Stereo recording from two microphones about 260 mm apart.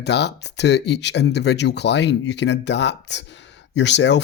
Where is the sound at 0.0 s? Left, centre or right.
Left.